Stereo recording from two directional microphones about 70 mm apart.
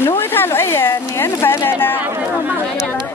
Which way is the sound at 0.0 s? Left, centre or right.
Left.